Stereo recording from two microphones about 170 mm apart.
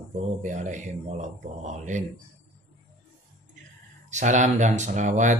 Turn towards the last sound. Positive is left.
turn(degrees=-45)  # may be behind; listen again after turning